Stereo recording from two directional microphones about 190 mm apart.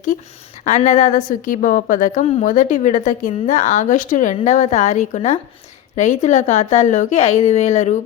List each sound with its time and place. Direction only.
0.6 s a woman's voice: 40° left (ahead or behind)